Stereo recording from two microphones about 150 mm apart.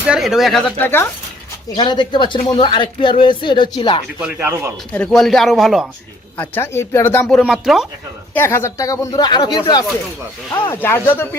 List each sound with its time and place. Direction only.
0.0 s speech: 5° right (ahead or behind)
0.8 s speech: 15° left (ahead or behind)
1.7 s speech: 30° left (ahead or behind)
4.2 s speech: 15° right (ahead or behind)
4.9 s speech: 5° left (ahead or behind)
6.3 s speech: 15° left (ahead or behind); by 7.9 s 5° right (ahead or behind)
8.3 s speech: 15° left (ahead or behind)
10.7 s speech: 15° left (ahead or behind)